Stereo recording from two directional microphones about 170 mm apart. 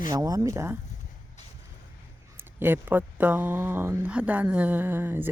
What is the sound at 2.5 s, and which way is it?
Speech, 15° right (ahead or behind).